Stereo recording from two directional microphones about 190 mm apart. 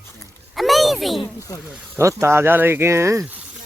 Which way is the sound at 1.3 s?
15° left (ahead or behind).